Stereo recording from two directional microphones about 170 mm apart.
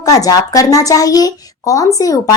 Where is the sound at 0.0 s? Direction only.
20° left (ahead or behind).